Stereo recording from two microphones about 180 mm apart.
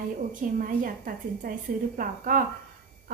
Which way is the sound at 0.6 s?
50° right (ahead or behind).